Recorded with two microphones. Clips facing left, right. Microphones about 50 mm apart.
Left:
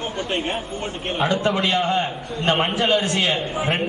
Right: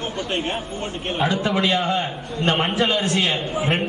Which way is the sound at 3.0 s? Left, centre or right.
Left.